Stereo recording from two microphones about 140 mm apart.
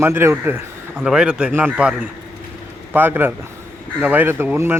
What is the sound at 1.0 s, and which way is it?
A man's voice, 5° right (ahead or behind).